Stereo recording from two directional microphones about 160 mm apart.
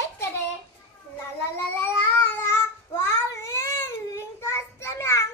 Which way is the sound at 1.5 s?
15° left (ahead or behind).